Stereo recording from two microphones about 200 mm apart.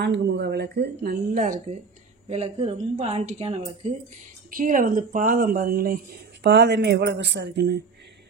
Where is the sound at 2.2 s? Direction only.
30° right (ahead or behind).